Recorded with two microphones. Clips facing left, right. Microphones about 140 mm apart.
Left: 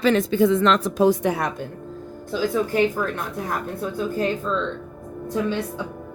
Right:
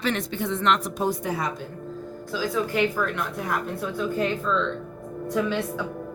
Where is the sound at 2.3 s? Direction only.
50° left (ahead or behind).